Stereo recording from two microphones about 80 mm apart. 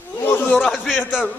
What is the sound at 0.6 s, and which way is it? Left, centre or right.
Speech, centre.